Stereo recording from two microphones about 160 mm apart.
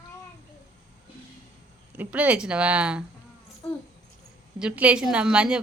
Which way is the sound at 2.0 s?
10° right (ahead or behind).